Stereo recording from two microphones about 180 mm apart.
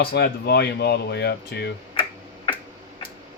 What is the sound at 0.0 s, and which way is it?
Speech, 65° left (ahead or behind).